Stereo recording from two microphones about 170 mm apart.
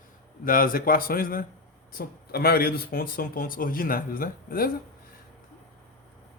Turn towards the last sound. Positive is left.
turn(degrees=60)  # may be behind; listen again after turning